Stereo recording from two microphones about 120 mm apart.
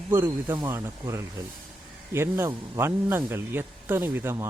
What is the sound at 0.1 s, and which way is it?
A man's voice, 20° right (ahead or behind).